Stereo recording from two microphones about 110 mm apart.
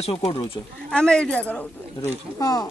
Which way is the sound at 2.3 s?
35° left (ahead or behind).